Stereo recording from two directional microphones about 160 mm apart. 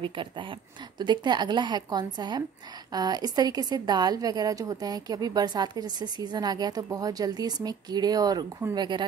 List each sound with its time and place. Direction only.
0.0 s a woman's voice: 30° right (ahead or behind)